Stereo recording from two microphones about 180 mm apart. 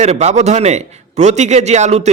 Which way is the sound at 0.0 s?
40° right (ahead or behind).